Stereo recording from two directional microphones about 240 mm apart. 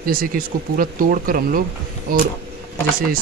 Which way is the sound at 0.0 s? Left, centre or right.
Right.